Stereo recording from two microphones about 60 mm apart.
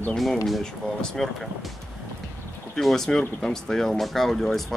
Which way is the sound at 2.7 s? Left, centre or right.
Centre.